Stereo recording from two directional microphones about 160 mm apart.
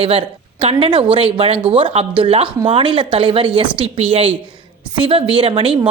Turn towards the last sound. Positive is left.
turn(degrees=-35)  # may be behind; listen again after turning